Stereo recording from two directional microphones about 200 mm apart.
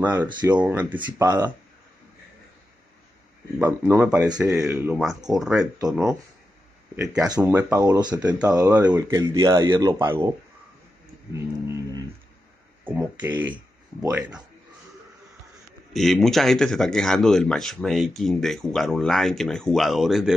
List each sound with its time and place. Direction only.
0.0 s speech: 10° right (ahead or behind)
3.5 s speech: 10° right (ahead or behind)
5.6 s speech: 20° right (ahead or behind)
7.0 s speech: 5° right (ahead or behind)
7.2 s speech: 15° right (ahead or behind)
11.3 s speech: 15° right (ahead or behind)
15.9 s speech: centre (ahead or behind)